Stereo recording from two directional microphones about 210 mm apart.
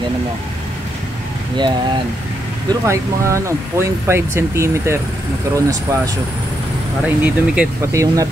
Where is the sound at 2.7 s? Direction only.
15° right (ahead or behind).